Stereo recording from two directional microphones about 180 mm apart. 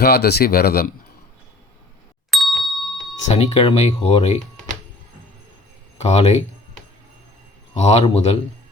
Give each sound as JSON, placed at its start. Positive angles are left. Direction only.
{"t": 0.0, "sound": "speech", "side_deg": 65}
{"t": 2.3, "sound": "ding", "side_deg": 0}
{"t": 3.2, "sound": "speech", "side_deg": 35}
{"t": 6.0, "sound": "speech", "side_deg": 35}
{"t": 7.8, "sound": "speech", "side_deg": 35}